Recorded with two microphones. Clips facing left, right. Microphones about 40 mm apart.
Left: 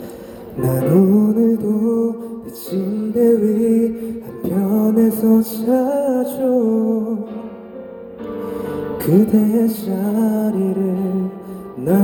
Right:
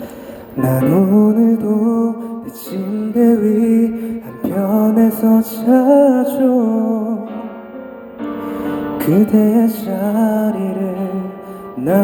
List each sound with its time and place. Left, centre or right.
0.6 s music: right